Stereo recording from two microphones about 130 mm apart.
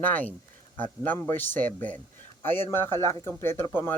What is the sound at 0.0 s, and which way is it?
Speech, 10° left (ahead or behind).